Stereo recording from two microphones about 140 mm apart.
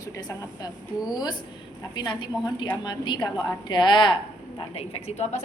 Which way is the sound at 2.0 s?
30° left (ahead or behind).